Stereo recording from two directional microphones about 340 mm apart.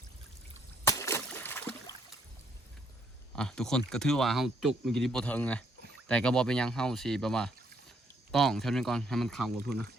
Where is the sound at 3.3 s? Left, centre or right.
Centre.